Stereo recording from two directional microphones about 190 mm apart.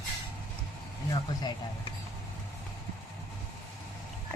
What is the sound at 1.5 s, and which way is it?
Speech, 25° left (ahead or behind).